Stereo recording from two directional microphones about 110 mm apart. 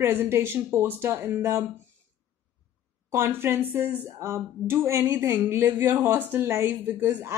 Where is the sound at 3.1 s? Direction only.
20° right (ahead or behind).